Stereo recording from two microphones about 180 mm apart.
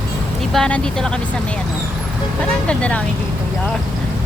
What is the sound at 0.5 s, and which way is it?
Speech, 5° left (ahead or behind).